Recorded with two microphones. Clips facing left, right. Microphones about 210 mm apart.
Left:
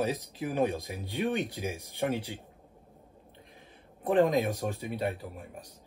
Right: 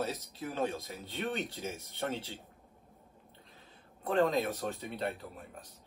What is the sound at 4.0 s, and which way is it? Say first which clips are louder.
Speech: left 4 dB; 15° left (ahead or behind).